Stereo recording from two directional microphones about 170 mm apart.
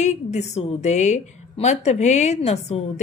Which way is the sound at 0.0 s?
40° left (ahead or behind).